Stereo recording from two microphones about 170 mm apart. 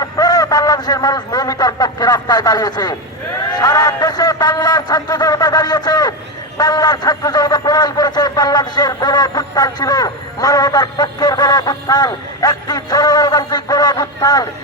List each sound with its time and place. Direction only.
0.0 s a man's voice: 20° left (ahead or behind)